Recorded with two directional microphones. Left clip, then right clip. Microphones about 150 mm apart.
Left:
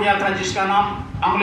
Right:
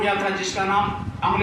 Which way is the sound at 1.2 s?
20° left (ahead or behind).